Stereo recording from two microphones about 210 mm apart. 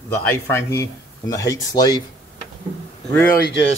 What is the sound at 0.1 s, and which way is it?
Speech, 10° left (ahead or behind).